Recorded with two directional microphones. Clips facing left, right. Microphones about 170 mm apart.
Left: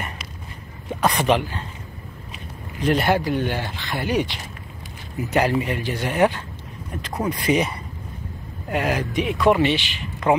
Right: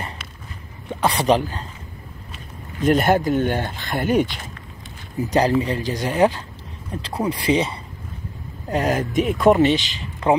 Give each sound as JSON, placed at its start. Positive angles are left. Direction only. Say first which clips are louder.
{"t": 1.2, "sound": "speech", "louder": "right 4 dB", "side_deg": -40}
{"t": 2.8, "sound": "speech", "louder": "right 3 dB", "side_deg": -45}
{"t": 5.2, "sound": "speech", "louder": "right 2 dB", "side_deg": -40}
{"t": 8.6, "sound": "speech", "louder": "right 2 dB", "side_deg": -40}